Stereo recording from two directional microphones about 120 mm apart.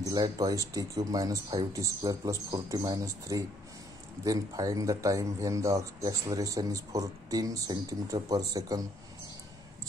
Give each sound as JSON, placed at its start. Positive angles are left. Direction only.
{"t": 0.1, "sound": "speech", "side_deg": -30}